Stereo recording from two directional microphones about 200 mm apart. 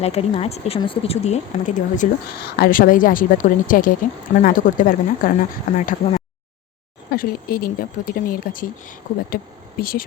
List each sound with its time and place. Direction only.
0.0 s speech: 30° left (ahead or behind)